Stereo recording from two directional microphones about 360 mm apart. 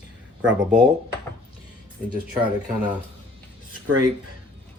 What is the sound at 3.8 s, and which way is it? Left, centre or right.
Speech, right.